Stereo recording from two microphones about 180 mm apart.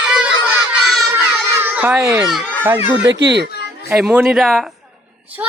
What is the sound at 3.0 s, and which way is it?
Speech, 70° right (ahead or behind).